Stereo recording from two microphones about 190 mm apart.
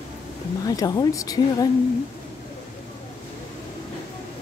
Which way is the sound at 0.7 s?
20° left (ahead or behind).